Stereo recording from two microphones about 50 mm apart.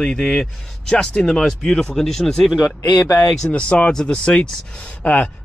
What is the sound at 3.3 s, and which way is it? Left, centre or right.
Speech, left.